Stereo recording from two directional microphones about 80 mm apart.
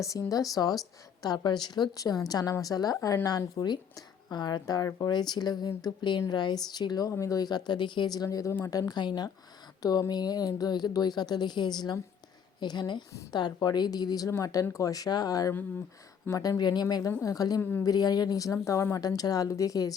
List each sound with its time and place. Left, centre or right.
0.0 s speech: left
1.2 s speech: left
6.2 s speech: left
7.1 s speech: left
9.8 s speech: left
14.3 s speech: left
17.1 s speech: left
17.6 s a woman's voice: left
17.8 s speech: left
18.9 s speech: left